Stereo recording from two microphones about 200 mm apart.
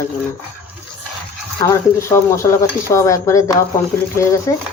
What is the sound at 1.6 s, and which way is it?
Speech, 15° left (ahead or behind).